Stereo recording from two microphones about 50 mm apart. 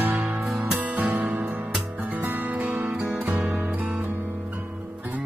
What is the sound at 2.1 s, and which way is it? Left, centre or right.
Music, right.